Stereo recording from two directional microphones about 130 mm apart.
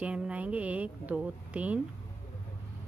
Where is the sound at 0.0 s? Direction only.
10° right (ahead or behind).